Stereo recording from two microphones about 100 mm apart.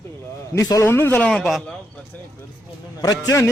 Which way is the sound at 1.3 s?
Centre (ahead or behind).